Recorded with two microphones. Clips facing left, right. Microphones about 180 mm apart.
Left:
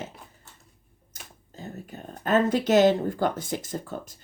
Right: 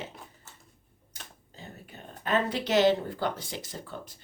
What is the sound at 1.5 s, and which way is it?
Speech, 45° left (ahead or behind).